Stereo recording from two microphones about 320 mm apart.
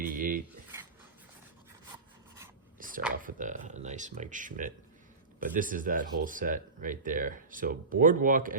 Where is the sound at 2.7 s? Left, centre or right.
Right.